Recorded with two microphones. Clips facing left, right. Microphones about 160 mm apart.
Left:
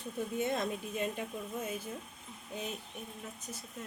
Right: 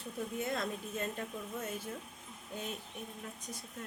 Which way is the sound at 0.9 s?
10° left (ahead or behind).